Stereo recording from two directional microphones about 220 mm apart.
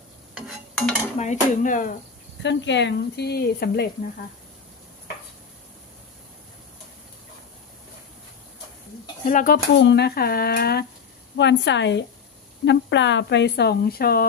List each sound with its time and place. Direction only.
0.3 s stir: centre (ahead or behind)
1.1 s speech: 35° left (ahead or behind)
2.4 s speech: 55° left (ahead or behind)
9.2 s speech: 35° left (ahead or behind)
9.7 s speech: 50° left (ahead or behind)